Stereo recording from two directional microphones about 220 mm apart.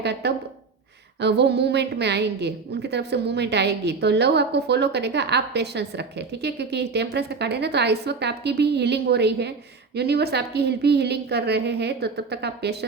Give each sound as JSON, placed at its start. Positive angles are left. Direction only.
{"t": 0.0, "sound": "a woman's voice", "side_deg": -50}